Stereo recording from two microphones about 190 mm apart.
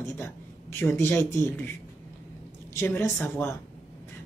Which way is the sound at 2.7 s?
10° left (ahead or behind).